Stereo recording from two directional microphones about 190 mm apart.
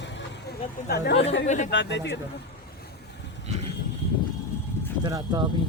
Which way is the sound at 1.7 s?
65° left (ahead or behind).